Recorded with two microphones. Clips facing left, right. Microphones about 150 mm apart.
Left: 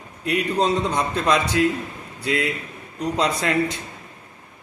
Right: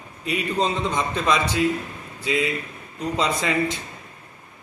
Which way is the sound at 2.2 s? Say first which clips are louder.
Even; 65° left (ahead or behind).